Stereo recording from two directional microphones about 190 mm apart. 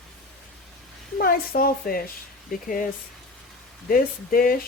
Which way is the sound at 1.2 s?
50° left (ahead or behind).